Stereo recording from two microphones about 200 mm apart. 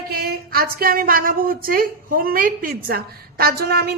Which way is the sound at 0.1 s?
50° right (ahead or behind).